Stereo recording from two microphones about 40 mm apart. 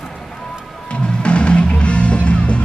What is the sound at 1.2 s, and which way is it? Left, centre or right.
Music, left.